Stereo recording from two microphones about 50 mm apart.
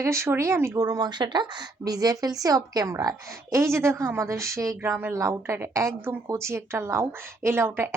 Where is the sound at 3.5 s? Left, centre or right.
Right.